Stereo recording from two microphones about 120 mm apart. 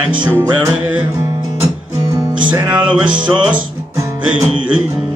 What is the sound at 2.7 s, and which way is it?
Music, 10° right (ahead or behind).